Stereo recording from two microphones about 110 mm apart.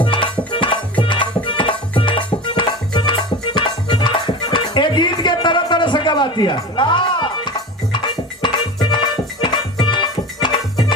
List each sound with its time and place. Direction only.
0.0 s music: 50° left (ahead or behind)